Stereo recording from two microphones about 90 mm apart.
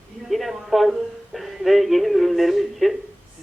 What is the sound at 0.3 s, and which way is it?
A man's voice, centre (ahead or behind).